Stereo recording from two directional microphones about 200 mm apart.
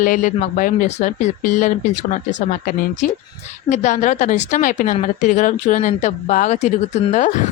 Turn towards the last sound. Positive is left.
turn(degrees=35)  # may be behind; listen again after turning